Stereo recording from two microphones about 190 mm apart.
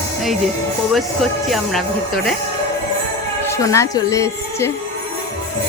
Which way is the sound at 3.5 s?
15° left (ahead or behind).